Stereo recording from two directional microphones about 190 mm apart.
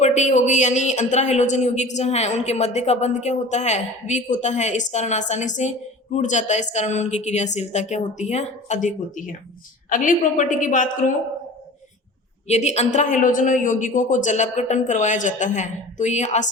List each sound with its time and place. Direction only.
0.0 s a woman's voice: 40° left (ahead or behind)
12.5 s speech: 35° left (ahead or behind)